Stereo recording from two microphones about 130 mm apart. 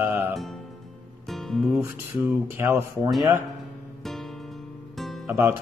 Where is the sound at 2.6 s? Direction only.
20° right (ahead or behind).